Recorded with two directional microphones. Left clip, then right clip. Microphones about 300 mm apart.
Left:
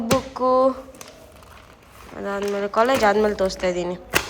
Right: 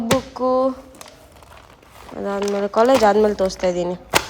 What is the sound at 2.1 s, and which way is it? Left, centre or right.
Speech, centre.